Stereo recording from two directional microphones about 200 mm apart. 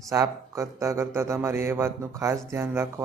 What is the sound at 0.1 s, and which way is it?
Speech, 15° right (ahead or behind).